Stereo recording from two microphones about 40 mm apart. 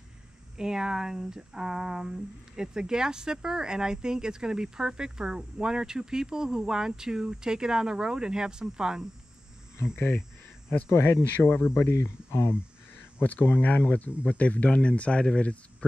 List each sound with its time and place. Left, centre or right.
0.6 s speech: centre
9.9 s speech: left
11.4 s speech: left
11.7 s speech: left
13.2 s speech: left